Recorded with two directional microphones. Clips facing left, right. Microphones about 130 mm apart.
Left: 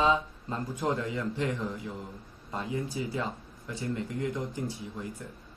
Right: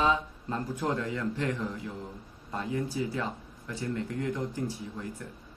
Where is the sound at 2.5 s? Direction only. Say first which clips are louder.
Right 1 dB; 20° left (ahead or behind).